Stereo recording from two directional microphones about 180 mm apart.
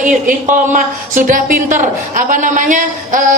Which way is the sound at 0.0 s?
45° right (ahead or behind).